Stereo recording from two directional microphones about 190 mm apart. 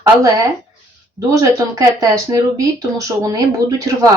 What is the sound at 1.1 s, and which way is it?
A woman's voice, 20° right (ahead or behind).